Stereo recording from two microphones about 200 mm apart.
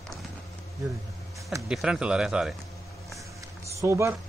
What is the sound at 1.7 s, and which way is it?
Speech, 5° right (ahead or behind).